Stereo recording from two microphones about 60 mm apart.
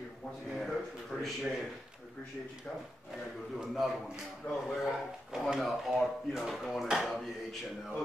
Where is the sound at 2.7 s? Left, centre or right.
Left.